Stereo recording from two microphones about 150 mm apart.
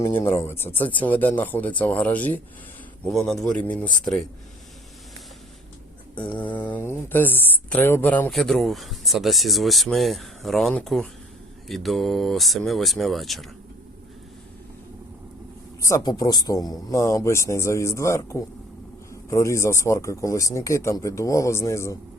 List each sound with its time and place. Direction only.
0.2 s speech: 15° left (ahead or behind)
6.1 s speech: 10° left (ahead or behind)
15.8 s speech: 25° left (ahead or behind)